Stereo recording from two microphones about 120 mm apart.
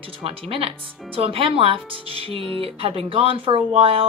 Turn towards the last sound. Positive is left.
turn(degrees=-55)  # may be behind; listen again after turning